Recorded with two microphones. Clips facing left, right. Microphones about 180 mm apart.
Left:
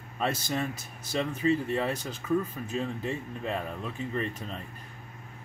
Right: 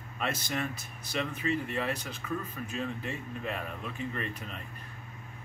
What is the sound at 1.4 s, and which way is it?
Speech, 30° left (ahead or behind).